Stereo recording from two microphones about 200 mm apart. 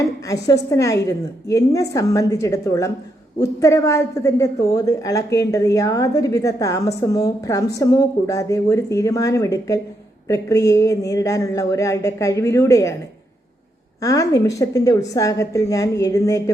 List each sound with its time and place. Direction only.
0.7 s a woman's voice: 15° left (ahead or behind)
14.0 s a woman's voice: 15° left (ahead or behind)